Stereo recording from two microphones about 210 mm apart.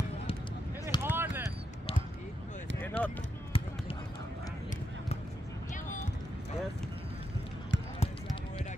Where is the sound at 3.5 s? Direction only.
25° left (ahead or behind).